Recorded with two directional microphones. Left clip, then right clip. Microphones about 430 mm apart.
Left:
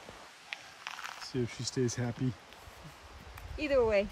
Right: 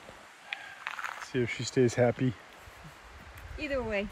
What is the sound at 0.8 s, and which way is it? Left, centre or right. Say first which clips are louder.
Speech: right 4 dB; centre.